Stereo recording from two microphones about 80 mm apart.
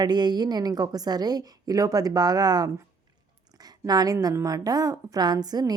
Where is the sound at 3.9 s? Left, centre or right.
Right.